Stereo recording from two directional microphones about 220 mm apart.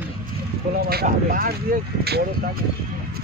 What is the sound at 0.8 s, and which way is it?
Speech, 40° right (ahead or behind).